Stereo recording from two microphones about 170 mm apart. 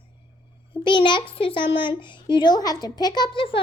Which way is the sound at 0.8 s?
30° left (ahead or behind).